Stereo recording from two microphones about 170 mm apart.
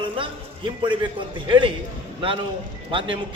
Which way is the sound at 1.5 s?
30° right (ahead or behind).